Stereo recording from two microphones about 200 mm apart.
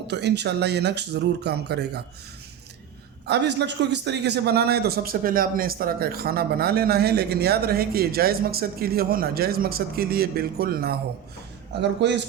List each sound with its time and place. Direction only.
0.1 s speech: 60° right (ahead or behind)
3.2 s a man's voice: 60° right (ahead or behind)
11.8 s speech: 60° right (ahead or behind)